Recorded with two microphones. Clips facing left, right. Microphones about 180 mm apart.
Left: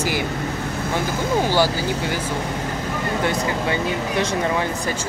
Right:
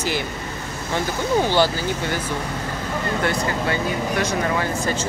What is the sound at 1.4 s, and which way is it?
Speech, 10° left (ahead or behind).